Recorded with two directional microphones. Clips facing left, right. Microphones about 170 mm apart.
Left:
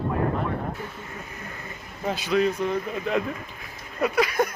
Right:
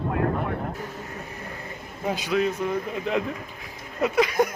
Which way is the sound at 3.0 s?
15° right (ahead or behind).